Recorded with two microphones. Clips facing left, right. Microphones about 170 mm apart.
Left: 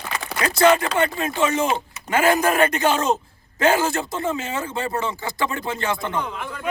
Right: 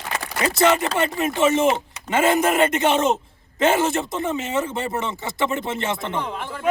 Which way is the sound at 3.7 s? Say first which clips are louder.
Even; centre (ahead or behind).